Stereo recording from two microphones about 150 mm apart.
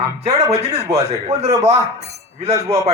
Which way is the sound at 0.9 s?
45° right (ahead or behind).